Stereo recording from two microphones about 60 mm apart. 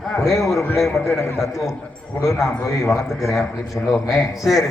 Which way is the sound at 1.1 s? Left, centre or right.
Left.